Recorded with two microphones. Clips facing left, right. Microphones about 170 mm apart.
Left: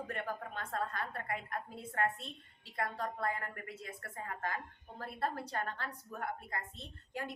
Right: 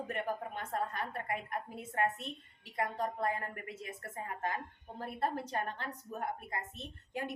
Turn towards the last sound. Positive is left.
turn(degrees=-20)  # may be behind; listen again after turning